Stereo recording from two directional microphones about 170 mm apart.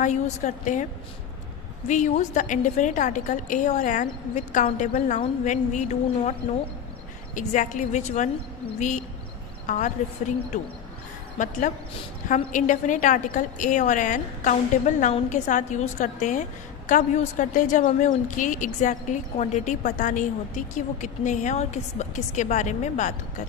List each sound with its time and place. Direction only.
0.0 s a woman's voice: 45° left (ahead or behind)
1.9 s a woman's voice: 45° left (ahead or behind)
7.3 s a woman's voice: 45° left (ahead or behind)
12.5 s a woman's voice: 45° left (ahead or behind)